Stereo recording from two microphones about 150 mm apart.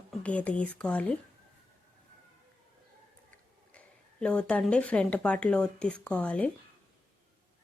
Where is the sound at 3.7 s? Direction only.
5° left (ahead or behind).